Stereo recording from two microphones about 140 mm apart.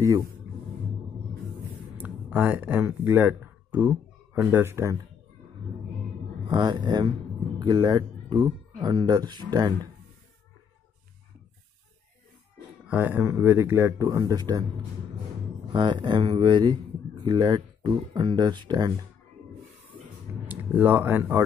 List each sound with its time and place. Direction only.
0.0 s speech: 25° right (ahead or behind)
2.0 s speech: 10° right (ahead or behind)
6.4 s speech: 35° right (ahead or behind)
12.8 s speech: 10° right (ahead or behind); by 14.7 s 30° right (ahead or behind)
15.7 s speech: 35° right (ahead or behind)
20.4 s speech: 10° right (ahead or behind)